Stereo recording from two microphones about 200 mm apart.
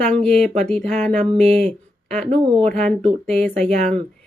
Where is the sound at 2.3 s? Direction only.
30° right (ahead or behind).